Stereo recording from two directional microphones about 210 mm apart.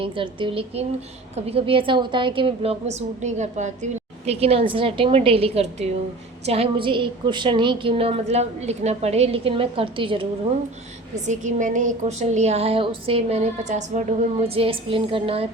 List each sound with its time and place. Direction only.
0.0 s a woman's voice: 25° right (ahead or behind)
11.1 s a woman's voice: 35° right (ahead or behind)